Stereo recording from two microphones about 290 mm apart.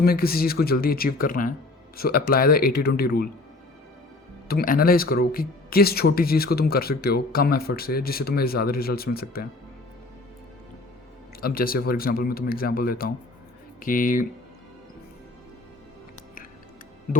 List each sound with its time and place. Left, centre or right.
0.0 s speech: left
4.4 s speech: left
11.3 s speech: left